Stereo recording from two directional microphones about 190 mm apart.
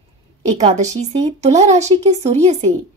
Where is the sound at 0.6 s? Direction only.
40° right (ahead or behind).